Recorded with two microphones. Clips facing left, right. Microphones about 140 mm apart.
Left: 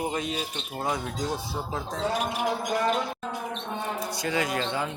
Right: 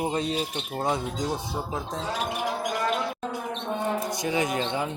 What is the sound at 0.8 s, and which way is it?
Speech, 20° right (ahead or behind).